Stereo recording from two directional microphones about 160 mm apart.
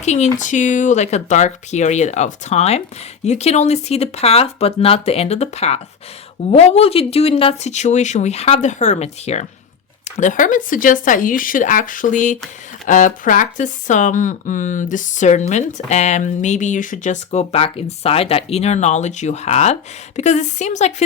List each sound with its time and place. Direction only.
0.0 s speech: 45° left (ahead or behind)
10.2 s speech: 55° left (ahead or behind)